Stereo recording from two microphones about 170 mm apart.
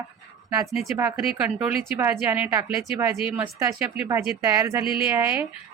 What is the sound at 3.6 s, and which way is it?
Speech, 15° right (ahead or behind).